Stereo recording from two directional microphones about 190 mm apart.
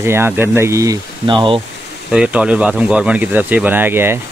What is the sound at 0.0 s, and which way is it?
Speech, 10° right (ahead or behind).